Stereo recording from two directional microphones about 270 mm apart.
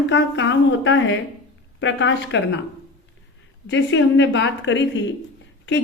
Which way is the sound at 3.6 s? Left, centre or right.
Left.